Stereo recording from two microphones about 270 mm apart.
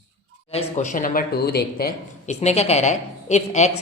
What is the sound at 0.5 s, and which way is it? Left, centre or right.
Speech, left.